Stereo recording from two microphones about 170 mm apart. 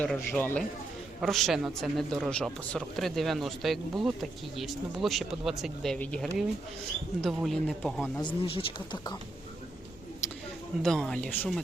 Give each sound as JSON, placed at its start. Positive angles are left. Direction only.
{"t": 0.0, "sound": "speech", "side_deg": 10}
{"t": 8.2, "sound": "speech", "side_deg": 30}
{"t": 10.2, "sound": "a sound", "side_deg": 15}
{"t": 10.8, "sound": "speech", "side_deg": 5}